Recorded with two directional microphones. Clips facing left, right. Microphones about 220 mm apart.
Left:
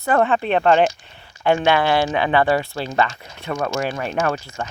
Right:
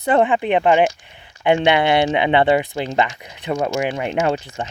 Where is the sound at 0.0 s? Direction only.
20° right (ahead or behind).